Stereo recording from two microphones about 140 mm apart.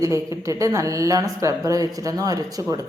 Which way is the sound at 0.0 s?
25° right (ahead or behind).